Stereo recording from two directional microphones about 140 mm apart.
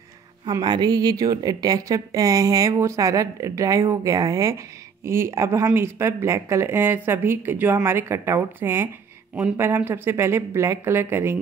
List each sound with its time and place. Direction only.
0.5 s a woman's voice: 30° right (ahead or behind)